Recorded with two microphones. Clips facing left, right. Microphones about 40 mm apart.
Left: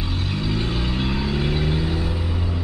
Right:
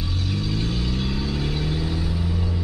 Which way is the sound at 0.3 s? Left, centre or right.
Left.